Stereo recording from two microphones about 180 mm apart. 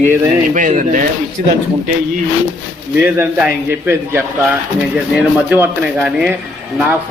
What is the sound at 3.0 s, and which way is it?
Speech, 5° right (ahead or behind).